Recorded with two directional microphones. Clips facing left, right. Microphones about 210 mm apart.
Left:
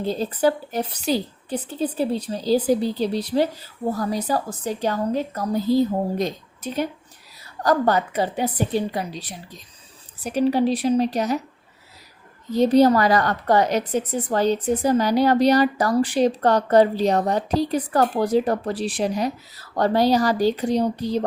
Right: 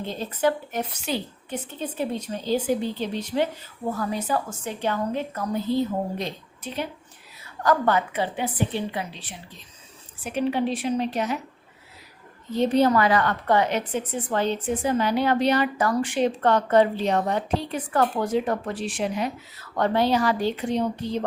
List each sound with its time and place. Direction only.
0.0 s a woman's voice: 35° left (ahead or behind)
12.5 s a woman's voice: 40° left (ahead or behind)